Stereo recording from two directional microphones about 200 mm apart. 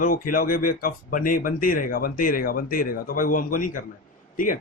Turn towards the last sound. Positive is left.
turn(degrees=45)  # may be behind; listen again after turning